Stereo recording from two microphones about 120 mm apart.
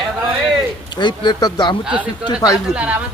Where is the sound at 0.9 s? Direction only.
40° left (ahead or behind).